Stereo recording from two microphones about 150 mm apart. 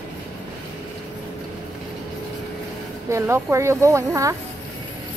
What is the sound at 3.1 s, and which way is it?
Speech, 20° right (ahead or behind).